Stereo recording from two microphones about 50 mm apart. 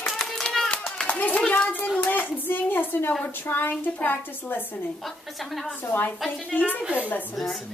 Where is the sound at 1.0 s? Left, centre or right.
Left.